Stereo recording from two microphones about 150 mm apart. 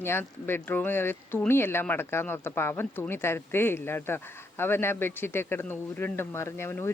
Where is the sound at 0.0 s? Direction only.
15° left (ahead or behind).